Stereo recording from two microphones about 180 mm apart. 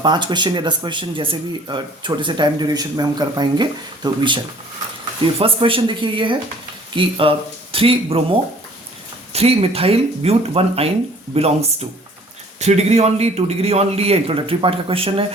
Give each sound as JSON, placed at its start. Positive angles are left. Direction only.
{"t": 0.0, "sound": "a man's voice", "side_deg": -25}
{"t": 9.3, "sound": "a man's voice", "side_deg": -35}